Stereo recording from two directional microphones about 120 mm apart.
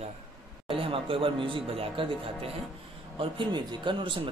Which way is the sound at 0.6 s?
50° right (ahead or behind).